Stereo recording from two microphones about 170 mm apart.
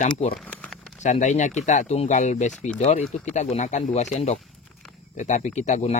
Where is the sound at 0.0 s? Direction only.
50° left (ahead or behind).